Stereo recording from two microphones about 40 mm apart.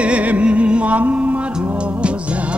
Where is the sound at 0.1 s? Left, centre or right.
Right.